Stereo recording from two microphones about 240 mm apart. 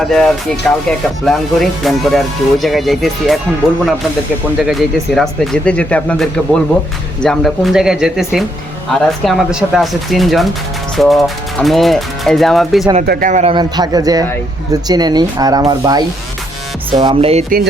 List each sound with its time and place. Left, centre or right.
0.0 s speech: centre
4.6 s speech: centre
13.0 s speech: right